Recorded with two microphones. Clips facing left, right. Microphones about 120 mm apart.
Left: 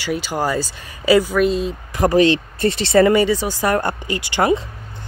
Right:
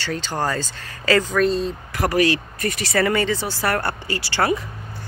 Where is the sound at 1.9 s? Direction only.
20° left (ahead or behind).